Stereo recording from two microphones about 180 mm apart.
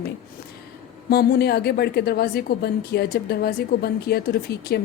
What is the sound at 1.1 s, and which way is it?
A woman's voice, 60° left (ahead or behind).